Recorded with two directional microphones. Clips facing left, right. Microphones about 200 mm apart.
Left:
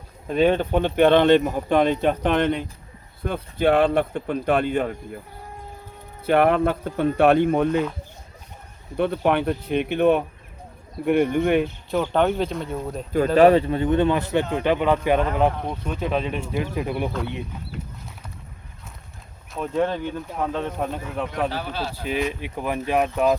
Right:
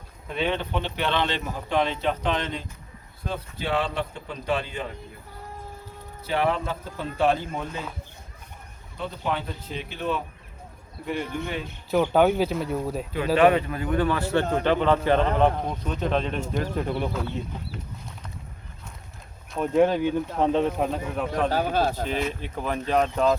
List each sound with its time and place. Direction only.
0.3 s speech: 45° left (ahead or behind)
6.2 s speech: 60° left (ahead or behind)
9.0 s speech: 65° left (ahead or behind)
12.1 s speech: 5° right (ahead or behind)
13.3 s a man's voice: 35° left (ahead or behind); by 17.9 s 10° left (ahead or behind)
19.5 s speech: 5° right (ahead or behind); by 20.7 s 20° right (ahead or behind)
20.7 s speech: centre (ahead or behind)
21.5 s speech: 45° right (ahead or behind)
22.3 s a man's voice: 10° left (ahead or behind)